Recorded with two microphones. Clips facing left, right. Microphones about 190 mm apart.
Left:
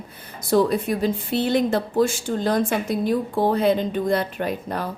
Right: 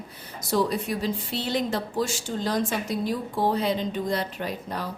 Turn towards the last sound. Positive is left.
turn(degrees=55)  # may be behind; listen again after turning